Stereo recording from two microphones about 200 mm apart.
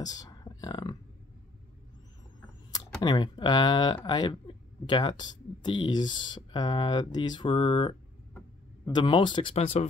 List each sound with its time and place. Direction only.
0.0 s a sound: 20° left (ahead or behind)
2.7 s speech: 20° left (ahead or behind)
8.9 s speech: 20° left (ahead or behind)